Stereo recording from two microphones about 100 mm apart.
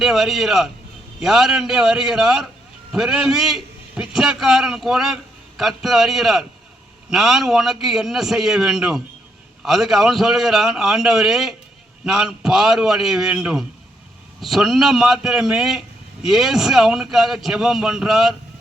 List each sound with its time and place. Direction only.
0.0 s a man's voice: centre (ahead or behind)